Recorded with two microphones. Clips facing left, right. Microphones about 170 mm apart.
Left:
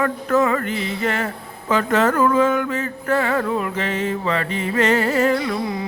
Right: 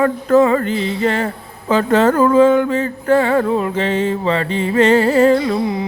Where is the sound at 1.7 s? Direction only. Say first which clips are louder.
Right 5 dB; 30° right (ahead or behind).